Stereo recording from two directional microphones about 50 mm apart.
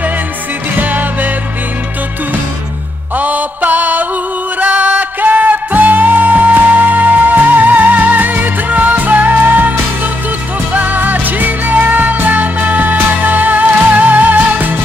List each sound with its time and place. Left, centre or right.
0.7 s music: right
3.2 s music: right